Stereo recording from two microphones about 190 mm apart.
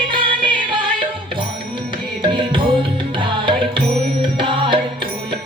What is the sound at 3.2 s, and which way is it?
Music, 25° right (ahead or behind).